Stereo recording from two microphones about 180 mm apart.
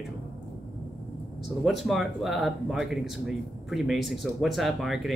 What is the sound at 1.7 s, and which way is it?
Speech, centre (ahead or behind).